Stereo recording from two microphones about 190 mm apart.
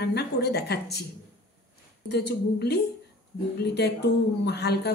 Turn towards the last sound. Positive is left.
turn(degrees=60)  # may be behind; listen again after turning